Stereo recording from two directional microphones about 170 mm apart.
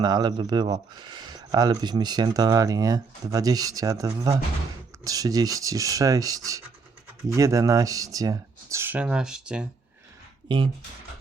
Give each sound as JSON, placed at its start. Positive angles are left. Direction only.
{"t": 0.0, "sound": "speech", "side_deg": -25}